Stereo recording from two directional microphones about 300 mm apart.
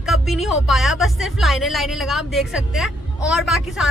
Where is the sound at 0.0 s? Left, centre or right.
Centre.